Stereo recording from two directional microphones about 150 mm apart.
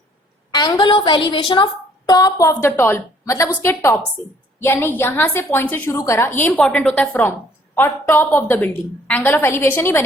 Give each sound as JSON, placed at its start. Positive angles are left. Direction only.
{"t": 0.5, "sound": "a woman's voice", "side_deg": 30}